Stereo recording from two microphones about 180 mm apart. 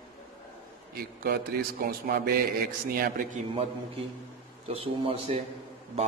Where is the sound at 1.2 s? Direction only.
55° right (ahead or behind).